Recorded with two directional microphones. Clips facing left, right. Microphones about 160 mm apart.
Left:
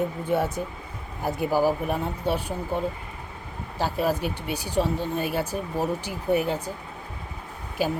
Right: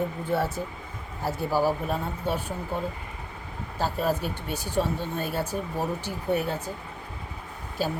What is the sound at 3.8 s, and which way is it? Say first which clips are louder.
Speech: left 2 dB; 10° left (ahead or behind).